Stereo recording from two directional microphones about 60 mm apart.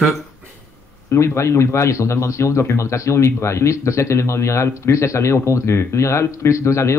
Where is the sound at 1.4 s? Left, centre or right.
Left.